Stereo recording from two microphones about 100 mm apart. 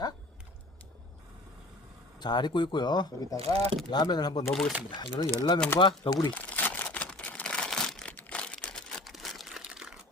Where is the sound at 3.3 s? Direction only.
70° right (ahead or behind).